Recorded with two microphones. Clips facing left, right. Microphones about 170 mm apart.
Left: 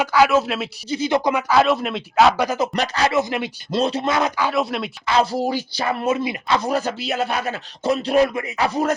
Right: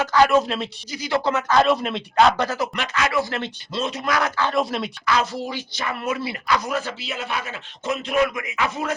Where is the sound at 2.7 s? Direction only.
35° left (ahead or behind).